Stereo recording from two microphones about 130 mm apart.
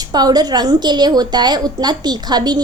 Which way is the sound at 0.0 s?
30° right (ahead or behind).